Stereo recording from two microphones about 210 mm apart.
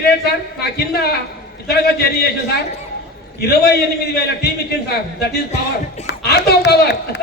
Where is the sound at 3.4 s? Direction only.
50° left (ahead or behind).